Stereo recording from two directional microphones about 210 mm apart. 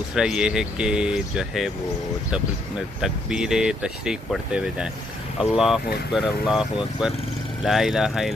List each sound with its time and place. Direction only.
0.1 s speech: 5° right (ahead or behind)
3.0 s speech: 5° right (ahead or behind)
7.6 s speech: centre (ahead or behind)